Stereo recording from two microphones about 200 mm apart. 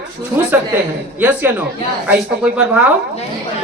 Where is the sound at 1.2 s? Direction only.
10° right (ahead or behind).